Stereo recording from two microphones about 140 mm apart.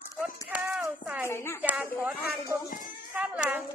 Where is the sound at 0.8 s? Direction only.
5° right (ahead or behind).